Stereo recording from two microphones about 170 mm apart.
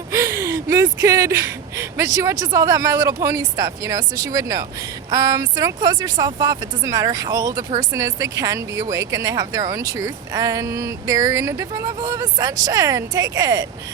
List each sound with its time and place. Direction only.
0.1 s speech: 15° right (ahead or behind)